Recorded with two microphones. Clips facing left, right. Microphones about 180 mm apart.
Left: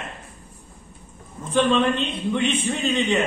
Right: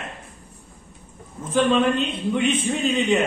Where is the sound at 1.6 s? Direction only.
5° right (ahead or behind).